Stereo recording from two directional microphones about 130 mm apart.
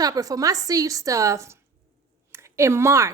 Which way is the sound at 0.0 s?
30° right (ahead or behind).